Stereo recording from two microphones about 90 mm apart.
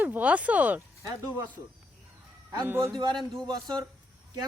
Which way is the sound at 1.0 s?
40° right (ahead or behind).